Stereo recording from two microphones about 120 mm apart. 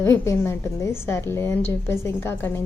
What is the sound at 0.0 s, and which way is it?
A woman's voice, 25° left (ahead or behind).